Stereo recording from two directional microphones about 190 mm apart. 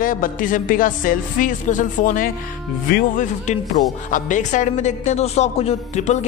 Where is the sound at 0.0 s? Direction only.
45° left (ahead or behind).